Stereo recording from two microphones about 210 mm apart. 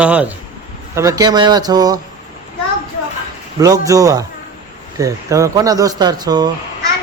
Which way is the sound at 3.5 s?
15° right (ahead or behind).